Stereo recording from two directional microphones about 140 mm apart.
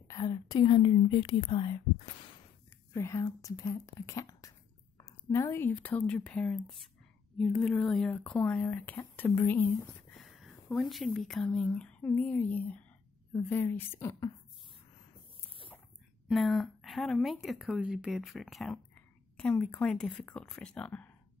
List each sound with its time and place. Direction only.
0.1 s a woman's voice: 30° left (ahead or behind)
2.9 s speech: 20° left (ahead or behind)
10.1 s speech: centre (ahead or behind); by 14.3 s 20° left (ahead or behind)
16.3 s a woman's voice: centre (ahead or behind)